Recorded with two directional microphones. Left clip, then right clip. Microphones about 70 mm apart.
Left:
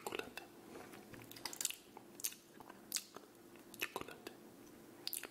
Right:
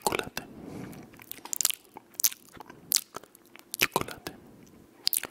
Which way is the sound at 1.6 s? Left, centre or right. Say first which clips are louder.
Right 13 dB; right.